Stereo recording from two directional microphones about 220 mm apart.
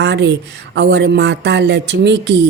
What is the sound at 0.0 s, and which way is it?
Speech, 50° right (ahead or behind).